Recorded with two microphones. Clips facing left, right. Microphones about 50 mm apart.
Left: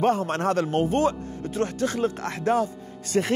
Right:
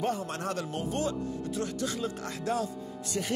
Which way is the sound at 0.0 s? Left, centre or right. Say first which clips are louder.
Left 9 dB; left.